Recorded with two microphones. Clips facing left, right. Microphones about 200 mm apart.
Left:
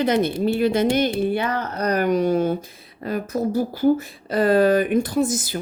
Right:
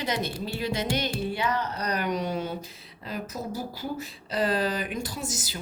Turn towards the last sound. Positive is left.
turn(degrees=55)  # may be behind; listen again after turning